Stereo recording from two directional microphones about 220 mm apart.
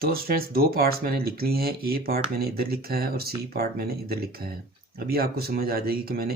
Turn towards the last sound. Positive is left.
turn(degrees=-45)  # may be behind; listen again after turning